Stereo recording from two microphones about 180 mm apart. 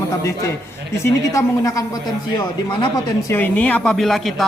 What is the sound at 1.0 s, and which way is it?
Speech, 15° left (ahead or behind).